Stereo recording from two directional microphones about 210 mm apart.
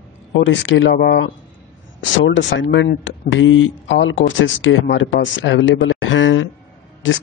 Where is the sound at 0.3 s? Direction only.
60° left (ahead or behind).